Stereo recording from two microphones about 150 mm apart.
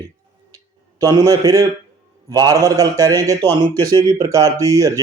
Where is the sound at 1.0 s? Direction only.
25° right (ahead or behind).